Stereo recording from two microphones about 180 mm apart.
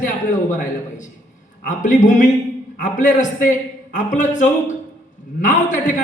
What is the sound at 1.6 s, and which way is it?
A man's voice, 45° left (ahead or behind).